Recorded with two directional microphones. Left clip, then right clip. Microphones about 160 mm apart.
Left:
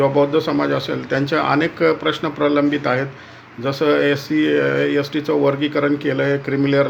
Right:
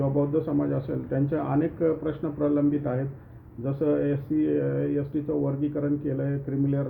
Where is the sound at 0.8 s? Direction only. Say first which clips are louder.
Left 8 dB; 20° left (ahead or behind).